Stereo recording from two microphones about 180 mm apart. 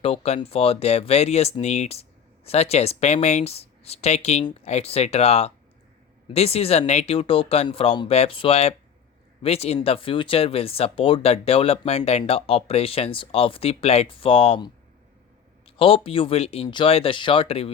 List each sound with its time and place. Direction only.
0.0 s speech: 30° left (ahead or behind)